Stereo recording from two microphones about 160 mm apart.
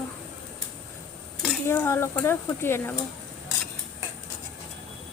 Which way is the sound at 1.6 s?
15° left (ahead or behind).